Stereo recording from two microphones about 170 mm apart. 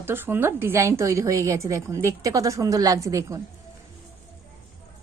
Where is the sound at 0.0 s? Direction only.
10° right (ahead or behind).